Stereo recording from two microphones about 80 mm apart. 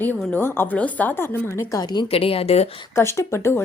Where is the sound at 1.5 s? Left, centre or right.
Left.